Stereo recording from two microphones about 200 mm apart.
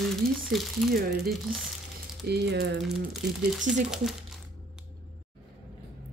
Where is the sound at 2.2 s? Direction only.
55° right (ahead or behind).